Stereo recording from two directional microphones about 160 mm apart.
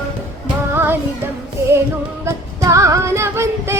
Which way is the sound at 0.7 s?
15° right (ahead or behind).